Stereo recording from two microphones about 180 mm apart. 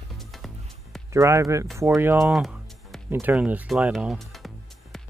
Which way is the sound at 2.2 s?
Centre (ahead or behind).